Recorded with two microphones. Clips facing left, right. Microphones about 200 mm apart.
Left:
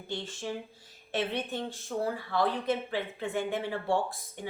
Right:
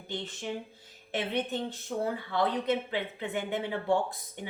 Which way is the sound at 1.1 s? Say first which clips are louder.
Right 1 dB; 20° right (ahead or behind).